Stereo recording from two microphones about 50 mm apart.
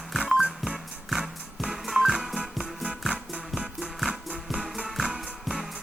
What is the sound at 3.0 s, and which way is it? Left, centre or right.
Music, right.